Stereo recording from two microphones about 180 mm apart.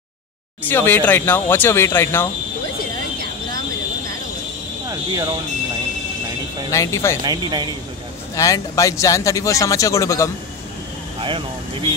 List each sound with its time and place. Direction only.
0.7 s speech: 10° left (ahead or behind)
4.8 s speech: 20° right (ahead or behind)
6.7 s speech: 15° left (ahead or behind)
7.2 s a man's voice: 25° right (ahead or behind)
8.4 s speech: 20° left (ahead or behind)
11.1 s speech: 30° right (ahead or behind)